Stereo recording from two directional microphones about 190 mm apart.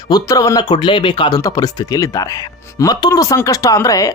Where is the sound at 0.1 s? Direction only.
20° left (ahead or behind).